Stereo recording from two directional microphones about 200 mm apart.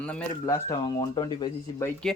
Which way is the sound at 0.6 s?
20° left (ahead or behind).